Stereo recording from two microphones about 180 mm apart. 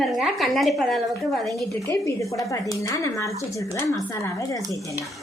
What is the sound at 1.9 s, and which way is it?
Speech, 15° left (ahead or behind).